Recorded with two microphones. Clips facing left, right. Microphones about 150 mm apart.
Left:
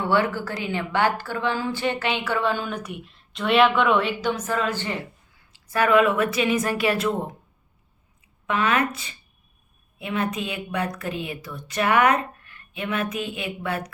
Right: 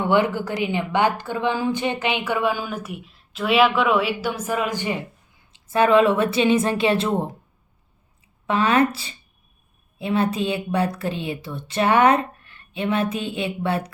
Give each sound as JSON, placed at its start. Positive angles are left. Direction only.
{"t": 0.0, "sound": "a woman's voice", "side_deg": -15}
{"t": 8.4, "sound": "a woman's voice", "side_deg": -30}